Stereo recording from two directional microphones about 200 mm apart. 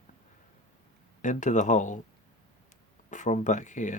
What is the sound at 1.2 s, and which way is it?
Speech, 40° left (ahead or behind).